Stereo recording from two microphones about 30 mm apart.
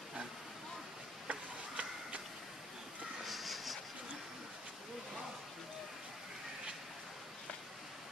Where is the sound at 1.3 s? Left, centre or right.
Right.